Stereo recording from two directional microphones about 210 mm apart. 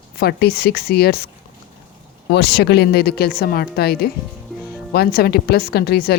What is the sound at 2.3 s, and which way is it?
Speech, 50° left (ahead or behind).